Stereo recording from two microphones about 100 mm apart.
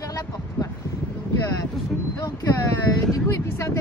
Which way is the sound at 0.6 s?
40° left (ahead or behind).